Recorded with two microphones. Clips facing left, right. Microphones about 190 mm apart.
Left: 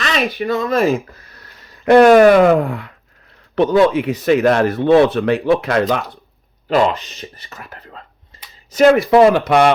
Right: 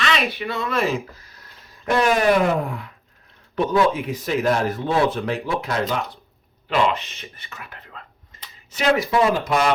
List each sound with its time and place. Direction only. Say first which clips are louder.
0.0 s speech: left 4 dB; 45° left (ahead or behind)
1.1 s speech: left 3 dB; 65° left (ahead or behind)
6.7 s speech: left 5 dB; 40° left (ahead or behind)
8.3 s a sound: left 1 dB; 30° left (ahead or behind)
8.7 s speech: left 9 dB; 50° left (ahead or behind)
9.0 s speech: left 9 dB; 70° left (ahead or behind)